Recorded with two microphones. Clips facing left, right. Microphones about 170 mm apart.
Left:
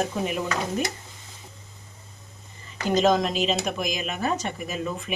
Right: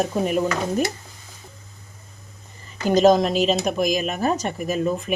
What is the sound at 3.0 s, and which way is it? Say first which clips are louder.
Speech: right 6 dB; 40° right (ahead or behind).